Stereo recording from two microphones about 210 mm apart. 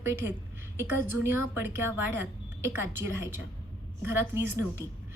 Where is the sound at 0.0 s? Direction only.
10° right (ahead or behind).